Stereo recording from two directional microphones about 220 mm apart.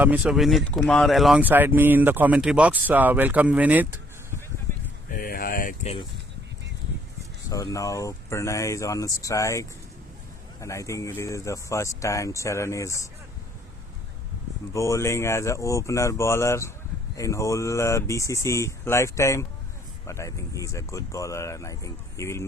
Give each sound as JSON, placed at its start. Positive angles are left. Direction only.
{"t": 0.0, "sound": "speech", "side_deg": -5}
{"t": 5.1, "sound": "a sound", "side_deg": 40}
{"t": 7.5, "sound": "speech", "side_deg": 15}
{"t": 14.7, "sound": "speech", "side_deg": 15}